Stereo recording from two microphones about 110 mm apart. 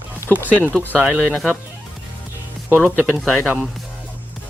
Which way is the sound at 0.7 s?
15° left (ahead or behind).